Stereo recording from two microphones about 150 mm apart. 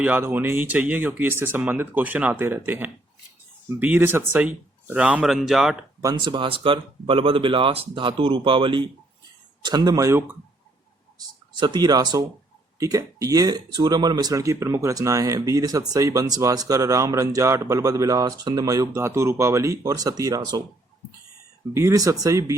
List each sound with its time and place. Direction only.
0.0 s speech: 10° right (ahead or behind)
6.0 s speech: 30° right (ahead or behind)
21.7 s speech: 20° right (ahead or behind)